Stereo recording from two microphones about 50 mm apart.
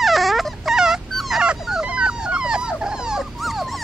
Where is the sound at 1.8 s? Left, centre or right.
Centre.